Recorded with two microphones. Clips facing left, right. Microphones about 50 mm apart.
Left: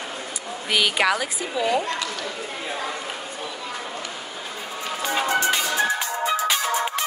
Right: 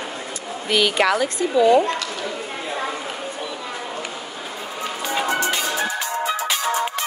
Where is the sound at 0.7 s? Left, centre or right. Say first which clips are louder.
Right 3 dB; centre.